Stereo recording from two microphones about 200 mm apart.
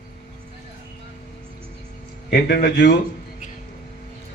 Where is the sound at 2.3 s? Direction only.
50° left (ahead or behind).